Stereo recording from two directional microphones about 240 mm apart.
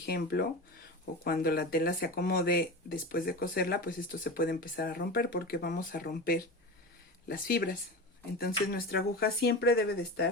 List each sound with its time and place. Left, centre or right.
0.0 s speech: left